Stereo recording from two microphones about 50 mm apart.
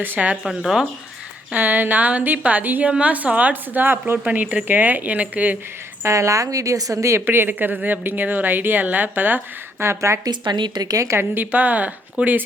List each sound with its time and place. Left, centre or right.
0.0 s a woman's voice: right
0.4 s speech: centre
1.5 s a woman's voice: right
4.3 s a woman's voice: right
6.1 s a woman's voice: right
7.3 s a woman's voice: right
9.8 s a woman's voice: right
11.2 s a woman's voice: right